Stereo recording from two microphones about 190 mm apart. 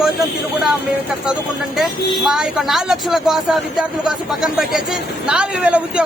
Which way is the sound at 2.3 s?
Centre (ahead or behind).